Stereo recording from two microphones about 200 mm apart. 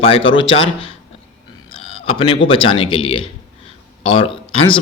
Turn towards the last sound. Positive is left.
turn(degrees=25)  # may be behind; listen again after turning